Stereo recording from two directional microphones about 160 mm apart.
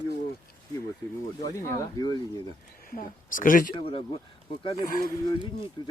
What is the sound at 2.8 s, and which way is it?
Speech, 60° left (ahead or behind).